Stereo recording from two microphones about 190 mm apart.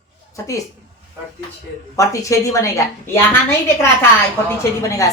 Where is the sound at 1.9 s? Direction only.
15° left (ahead or behind).